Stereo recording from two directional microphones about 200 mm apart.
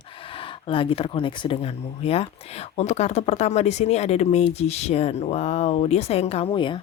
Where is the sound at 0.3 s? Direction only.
25° left (ahead or behind).